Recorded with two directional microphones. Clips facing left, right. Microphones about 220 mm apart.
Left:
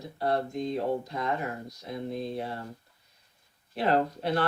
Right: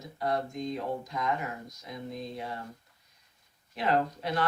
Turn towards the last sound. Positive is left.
turn(degrees=30)  # may be behind; listen again after turning